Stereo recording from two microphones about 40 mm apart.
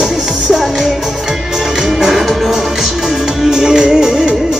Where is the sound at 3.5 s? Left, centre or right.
Centre.